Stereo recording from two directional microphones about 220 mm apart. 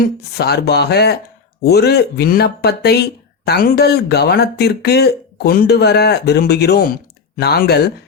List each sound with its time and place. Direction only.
0.0 s speech: 45° left (ahead or behind)